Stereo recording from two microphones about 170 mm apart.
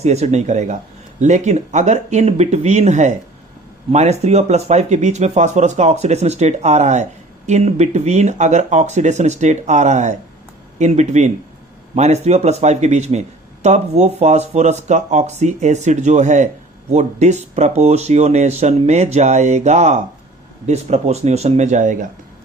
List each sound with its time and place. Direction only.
0.0 s speech: 40° right (ahead or behind)